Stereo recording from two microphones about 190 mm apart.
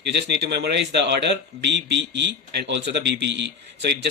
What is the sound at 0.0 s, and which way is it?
Speech, 65° right (ahead or behind).